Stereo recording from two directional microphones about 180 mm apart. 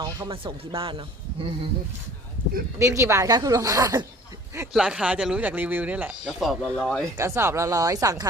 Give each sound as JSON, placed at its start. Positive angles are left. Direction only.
{"t": 0.3, "sound": "speech", "side_deg": -30}
{"t": 2.7, "sound": "speech", "side_deg": -15}
{"t": 4.7, "sound": "speech", "side_deg": -5}
{"t": 7.2, "sound": "speech", "side_deg": -15}